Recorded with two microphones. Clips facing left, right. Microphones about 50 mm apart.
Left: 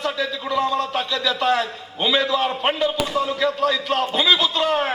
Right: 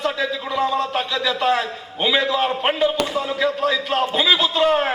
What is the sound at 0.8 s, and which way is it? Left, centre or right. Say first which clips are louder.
A man's voice: right 1 dB; right.